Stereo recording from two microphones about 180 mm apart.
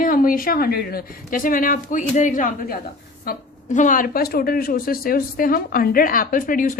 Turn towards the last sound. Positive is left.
turn(degrees=50)  # may be behind; listen again after turning